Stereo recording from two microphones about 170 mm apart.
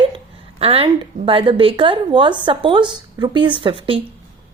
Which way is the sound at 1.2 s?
30° right (ahead or behind).